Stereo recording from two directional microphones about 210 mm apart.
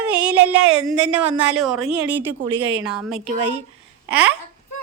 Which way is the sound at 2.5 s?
25° right (ahead or behind).